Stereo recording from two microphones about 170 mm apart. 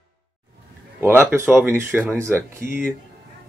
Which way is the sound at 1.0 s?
15° right (ahead or behind).